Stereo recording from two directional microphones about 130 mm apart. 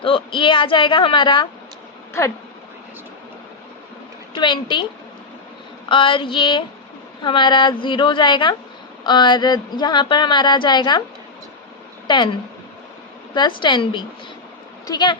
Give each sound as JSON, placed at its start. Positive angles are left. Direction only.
{"t": 0.0, "sound": "speech", "side_deg": 40}
{"t": 2.2, "sound": "speech", "side_deg": 20}
{"t": 4.4, "sound": "speech", "side_deg": 35}
{"t": 5.9, "sound": "speech", "side_deg": 40}
{"t": 12.0, "sound": "a woman's voice", "side_deg": 35}
{"t": 13.3, "sound": "speech", "side_deg": 35}